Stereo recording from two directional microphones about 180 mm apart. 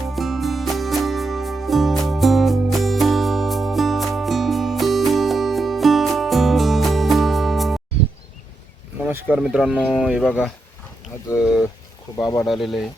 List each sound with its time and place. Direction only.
0.0 s music: centre (ahead or behind)
9.0 s speech: 10° right (ahead or behind)
12.1 s speech: 15° left (ahead or behind)
12.5 s speech: centre (ahead or behind)